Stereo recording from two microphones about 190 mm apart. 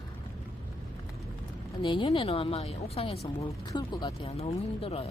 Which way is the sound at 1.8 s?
25° left (ahead or behind).